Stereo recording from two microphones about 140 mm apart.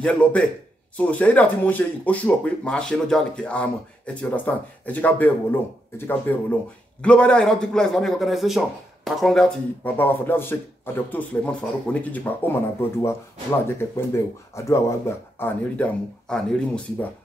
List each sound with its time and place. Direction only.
0.0 s speech: 10° left (ahead or behind)